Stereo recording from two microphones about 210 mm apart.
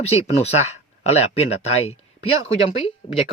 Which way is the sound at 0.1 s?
30° left (ahead or behind).